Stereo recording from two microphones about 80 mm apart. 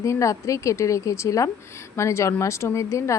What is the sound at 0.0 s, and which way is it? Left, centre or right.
A woman's voice, left.